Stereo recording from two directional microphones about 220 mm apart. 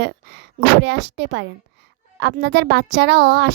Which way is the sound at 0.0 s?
50° right (ahead or behind).